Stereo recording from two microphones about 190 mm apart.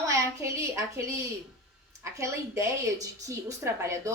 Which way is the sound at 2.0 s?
15° right (ahead or behind).